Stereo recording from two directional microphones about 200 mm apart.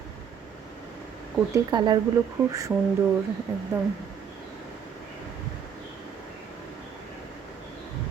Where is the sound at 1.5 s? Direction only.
20° right (ahead or behind).